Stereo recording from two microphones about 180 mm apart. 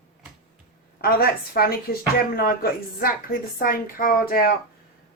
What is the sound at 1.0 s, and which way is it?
A woman's voice, 55° left (ahead or behind).